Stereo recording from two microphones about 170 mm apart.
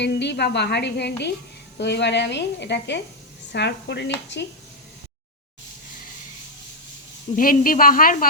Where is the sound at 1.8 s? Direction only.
90° left.